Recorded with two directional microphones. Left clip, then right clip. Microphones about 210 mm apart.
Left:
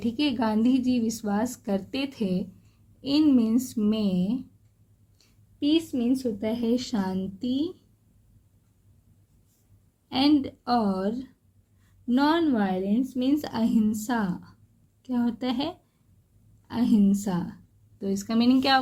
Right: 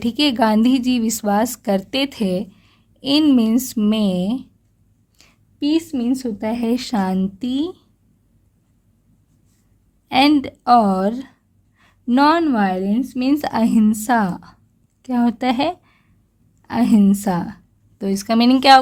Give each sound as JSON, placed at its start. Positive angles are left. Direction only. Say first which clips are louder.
{"t": 0.0, "sound": "a woman's voice", "louder": "right 10 dB", "side_deg": -50}
{"t": 5.1, "sound": "a sound", "louder": "right 12 dB", "side_deg": -55}
{"t": 6.1, "sound": "speech", "louder": "right 5 dB", "side_deg": -55}
{"t": 10.1, "sound": "a woman's voice", "louder": "right 8 dB", "side_deg": -55}